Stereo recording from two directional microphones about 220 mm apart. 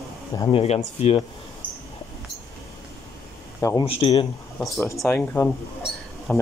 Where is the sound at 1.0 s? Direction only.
30° left (ahead or behind).